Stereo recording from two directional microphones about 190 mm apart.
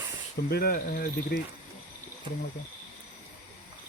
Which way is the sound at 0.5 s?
50° left (ahead or behind).